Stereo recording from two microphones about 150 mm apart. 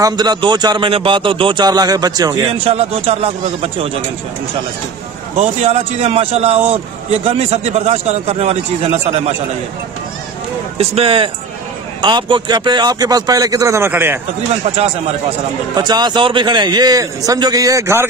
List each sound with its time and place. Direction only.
0.0 s speech: 25° right (ahead or behind)
2.5 s a man's voice: 40° right (ahead or behind)
5.4 s a man's voice: 45° right (ahead or behind)
10.8 s a man's voice: 40° right (ahead or behind); by 14.2 s 15° right (ahead or behind)
15.7 s speech: 30° right (ahead or behind)